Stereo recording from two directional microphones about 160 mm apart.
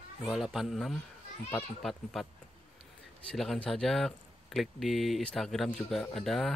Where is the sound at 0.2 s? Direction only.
Centre (ahead or behind).